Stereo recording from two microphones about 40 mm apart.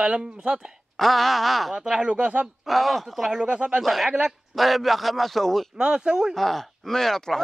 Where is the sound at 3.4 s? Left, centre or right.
Right.